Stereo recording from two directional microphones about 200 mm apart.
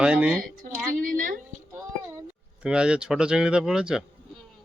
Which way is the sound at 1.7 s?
10° right (ahead or behind).